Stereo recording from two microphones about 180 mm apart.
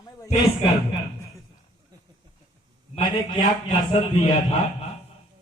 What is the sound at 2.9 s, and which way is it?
A man's voice, 30° left (ahead or behind).